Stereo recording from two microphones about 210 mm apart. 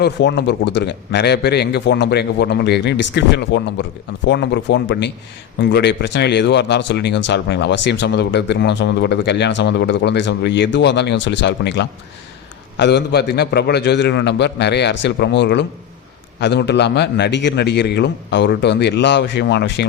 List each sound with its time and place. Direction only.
0.0 s a man's voice: 55° left (ahead or behind)